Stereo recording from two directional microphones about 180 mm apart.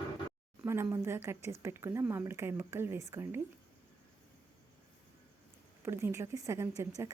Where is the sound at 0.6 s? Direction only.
15° right (ahead or behind).